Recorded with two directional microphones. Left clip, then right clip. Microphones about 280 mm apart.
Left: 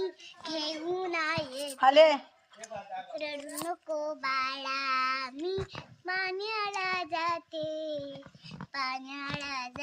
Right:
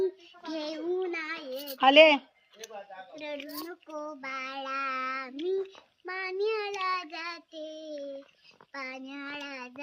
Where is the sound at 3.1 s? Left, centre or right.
Centre.